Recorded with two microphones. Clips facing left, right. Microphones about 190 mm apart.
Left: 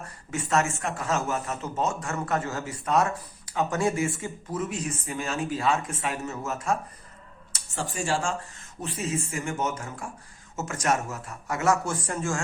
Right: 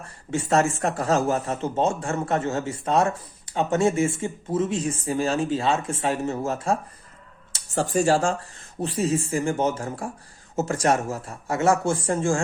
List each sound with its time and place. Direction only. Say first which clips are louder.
0.0 s speech: right 5 dB; 30° right (ahead or behind)